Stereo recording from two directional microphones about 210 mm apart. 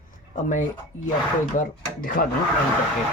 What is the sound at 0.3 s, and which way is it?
Speech, 35° left (ahead or behind).